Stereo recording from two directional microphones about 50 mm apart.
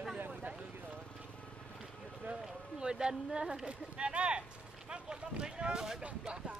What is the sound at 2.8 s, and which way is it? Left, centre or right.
Speech, centre.